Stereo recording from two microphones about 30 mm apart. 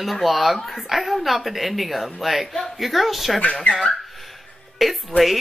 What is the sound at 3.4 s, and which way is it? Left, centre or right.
Speech, left.